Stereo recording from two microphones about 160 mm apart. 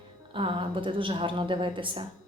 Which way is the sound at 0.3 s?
30° right (ahead or behind).